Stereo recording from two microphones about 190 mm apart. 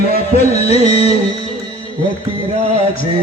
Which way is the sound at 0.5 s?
35° left (ahead or behind).